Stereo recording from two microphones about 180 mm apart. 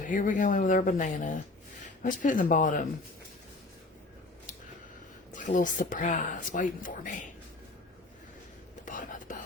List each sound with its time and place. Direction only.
0.1 s speech: 45° left (ahead or behind)
5.3 s speech: 45° left (ahead or behind)
8.8 s whispering: 45° left (ahead or behind)